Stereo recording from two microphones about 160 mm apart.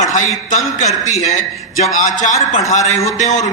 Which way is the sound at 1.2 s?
55° left (ahead or behind).